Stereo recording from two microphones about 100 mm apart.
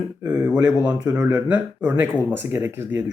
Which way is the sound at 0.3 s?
10° right (ahead or behind).